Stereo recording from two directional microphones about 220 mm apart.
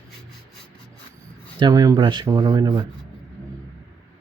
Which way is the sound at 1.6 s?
15° right (ahead or behind).